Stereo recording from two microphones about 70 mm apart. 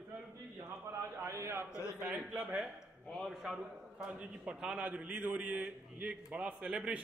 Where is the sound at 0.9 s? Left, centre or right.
Right.